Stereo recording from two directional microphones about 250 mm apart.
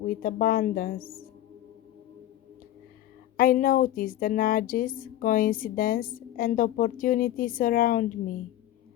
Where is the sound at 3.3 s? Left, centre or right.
Left.